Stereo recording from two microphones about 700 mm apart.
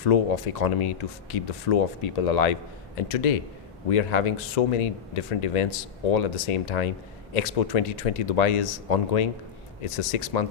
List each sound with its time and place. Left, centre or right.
0.0 s speech: left